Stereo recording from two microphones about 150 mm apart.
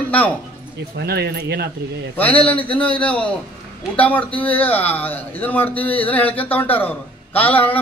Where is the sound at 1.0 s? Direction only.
90° right.